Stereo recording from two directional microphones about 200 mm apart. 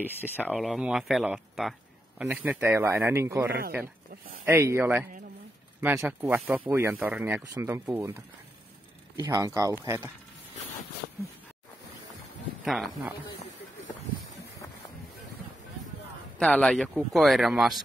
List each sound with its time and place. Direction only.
0.0 s a man's voice: 10° right (ahead or behind)
4.6 s speech: 15° right (ahead or behind)
11.0 s a sound: 55° left (ahead or behind)
12.6 s speech: centre (ahead or behind)
16.3 s speech: 5° left (ahead or behind)